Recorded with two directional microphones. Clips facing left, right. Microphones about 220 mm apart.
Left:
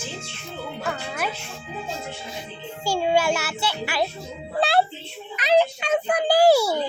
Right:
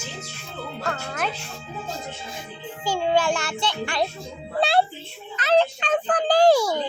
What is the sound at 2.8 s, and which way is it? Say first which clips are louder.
A child's voice: left 1 dB; 10° left (ahead or behind).